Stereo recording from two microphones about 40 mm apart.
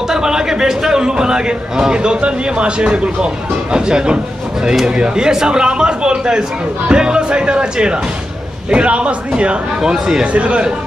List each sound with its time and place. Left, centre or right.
0.1 s a man's voice: centre
9.8 s speech: centre
10.3 s a man's voice: right